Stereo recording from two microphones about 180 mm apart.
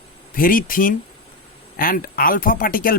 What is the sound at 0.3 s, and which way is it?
Speech, 50° left (ahead or behind).